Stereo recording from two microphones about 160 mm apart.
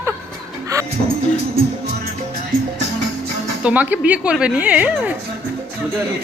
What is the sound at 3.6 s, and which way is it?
A woman's voice, 10° right (ahead or behind).